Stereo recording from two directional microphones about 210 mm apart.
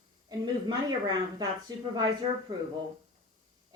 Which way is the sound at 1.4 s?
20° right (ahead or behind).